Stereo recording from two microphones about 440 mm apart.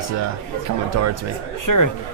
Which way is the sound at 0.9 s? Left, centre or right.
Right.